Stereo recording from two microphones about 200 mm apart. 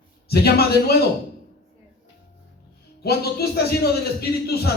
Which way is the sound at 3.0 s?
50° left (ahead or behind).